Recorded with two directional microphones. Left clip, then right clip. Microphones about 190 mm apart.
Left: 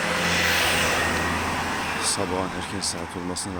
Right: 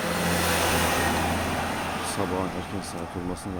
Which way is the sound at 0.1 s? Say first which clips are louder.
Left 3 dB; 35° right (ahead or behind).